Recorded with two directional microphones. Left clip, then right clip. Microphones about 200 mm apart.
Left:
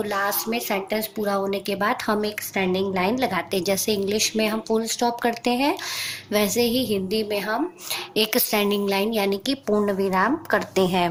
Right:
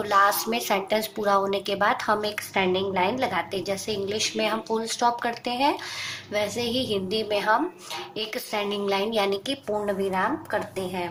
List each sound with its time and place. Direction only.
0.1 s speech: centre (ahead or behind)
2.7 s a woman's voice: 50° left (ahead or behind)
7.2 s speech: centre (ahead or behind)
8.1 s a woman's voice: 50° left (ahead or behind)